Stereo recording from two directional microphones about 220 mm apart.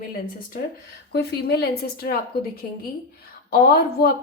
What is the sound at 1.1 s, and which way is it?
Speech, 45° left (ahead or behind).